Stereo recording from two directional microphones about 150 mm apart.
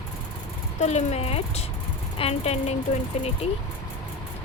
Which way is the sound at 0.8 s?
50° left (ahead or behind).